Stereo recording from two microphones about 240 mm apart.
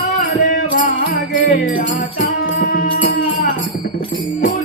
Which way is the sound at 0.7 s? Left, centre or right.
Left.